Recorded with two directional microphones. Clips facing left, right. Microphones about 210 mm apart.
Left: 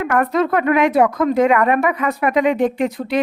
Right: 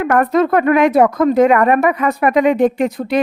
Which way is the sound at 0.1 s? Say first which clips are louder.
Right 4 dB; 45° right (ahead or behind).